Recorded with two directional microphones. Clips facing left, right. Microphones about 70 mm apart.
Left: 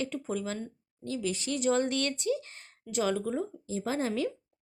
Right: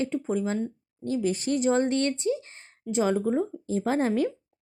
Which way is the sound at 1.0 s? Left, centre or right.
Right.